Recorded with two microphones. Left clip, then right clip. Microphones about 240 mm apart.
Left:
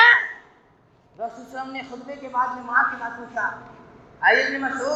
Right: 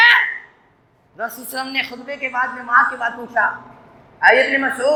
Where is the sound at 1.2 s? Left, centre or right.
Right.